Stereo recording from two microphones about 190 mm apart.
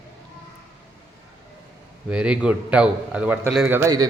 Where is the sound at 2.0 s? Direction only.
5° right (ahead or behind).